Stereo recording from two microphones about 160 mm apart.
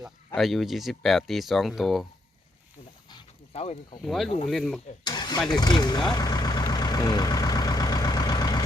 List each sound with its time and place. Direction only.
0.3 s speech: centre (ahead or behind)
3.5 s speech: 40° left (ahead or behind)
4.0 s speech: centre (ahead or behind)
5.0 s vehicle: 25° left (ahead or behind)